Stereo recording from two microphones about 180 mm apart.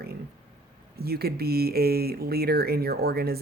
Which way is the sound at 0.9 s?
60° right (ahead or behind).